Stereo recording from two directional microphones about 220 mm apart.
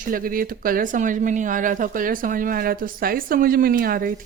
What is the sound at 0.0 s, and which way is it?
Speech, 40° right (ahead or behind).